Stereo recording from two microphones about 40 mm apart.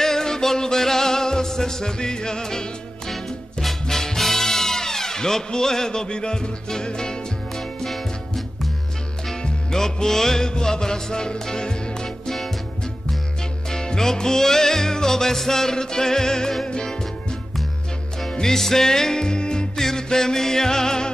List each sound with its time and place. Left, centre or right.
0.0 s music: centre
3.1 s music: centre
7.5 s music: centre
12.4 s music: centre